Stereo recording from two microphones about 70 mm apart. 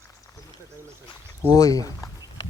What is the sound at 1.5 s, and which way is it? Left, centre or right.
Speech, left.